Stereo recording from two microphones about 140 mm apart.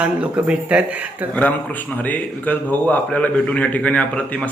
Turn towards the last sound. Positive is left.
turn(degrees=10)  # may be behind; listen again after turning